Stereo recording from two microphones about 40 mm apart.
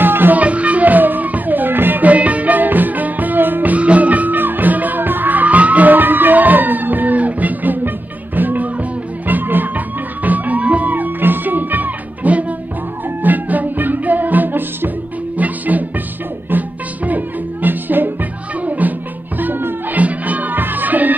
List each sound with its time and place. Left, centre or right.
0.0 s music: right
0.4 s music: right
3.7 s music: right
15.3 s music: right